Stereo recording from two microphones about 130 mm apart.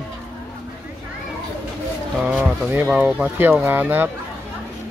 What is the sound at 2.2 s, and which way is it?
Speech, 15° right (ahead or behind).